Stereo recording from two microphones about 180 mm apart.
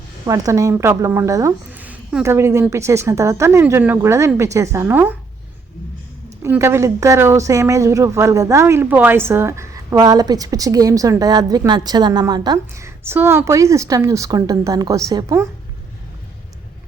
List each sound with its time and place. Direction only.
0.3 s speech: 20° right (ahead or behind)
6.4 s speech: 15° right (ahead or behind)